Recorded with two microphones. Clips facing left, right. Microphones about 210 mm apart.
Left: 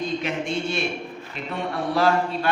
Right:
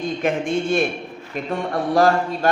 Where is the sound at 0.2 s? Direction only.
50° right (ahead or behind).